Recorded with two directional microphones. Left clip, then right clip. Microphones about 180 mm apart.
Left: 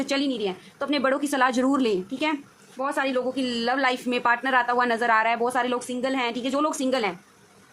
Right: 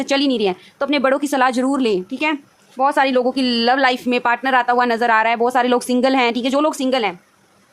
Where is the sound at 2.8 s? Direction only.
50° right (ahead or behind).